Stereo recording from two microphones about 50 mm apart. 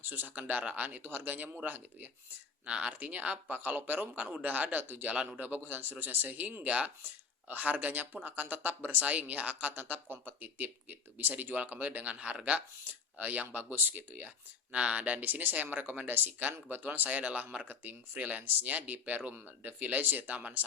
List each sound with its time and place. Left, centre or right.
0.0 s speech: right
0.3 s speech: right
2.6 s speech: right
2.9 s speech: right
5.1 s speech: right
5.4 s speech: right
6.7 s speech: right
7.0 s speech: right
12.8 s a sound: right
13.2 s speech: right
13.5 s speech: right
17.1 s speech: right